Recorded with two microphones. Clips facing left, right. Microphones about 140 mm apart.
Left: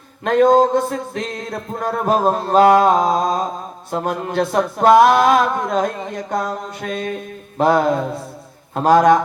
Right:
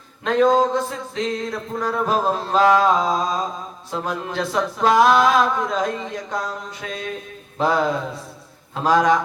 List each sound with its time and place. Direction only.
0.3 s speech: 50° left (ahead or behind)